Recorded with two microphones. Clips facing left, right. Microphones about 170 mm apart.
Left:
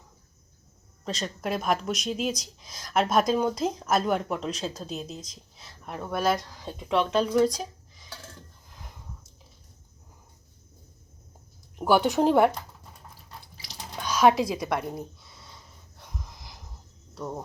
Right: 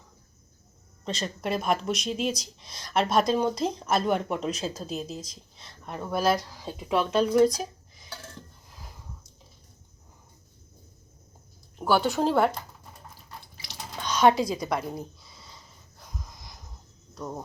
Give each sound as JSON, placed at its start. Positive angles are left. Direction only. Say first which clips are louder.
{"t": 1.0, "sound": "speech", "louder": "even", "side_deg": 0}
{"t": 11.8, "sound": "a woman's voice", "louder": "left 2 dB", "side_deg": 15}
{"t": 13.9, "sound": "a woman's voice", "louder": "even", "side_deg": 5}
{"t": 14.8, "sound": "a sound", "louder": "even", "side_deg": 0}
{"t": 17.2, "sound": "speech", "louder": "left 1 dB", "side_deg": 5}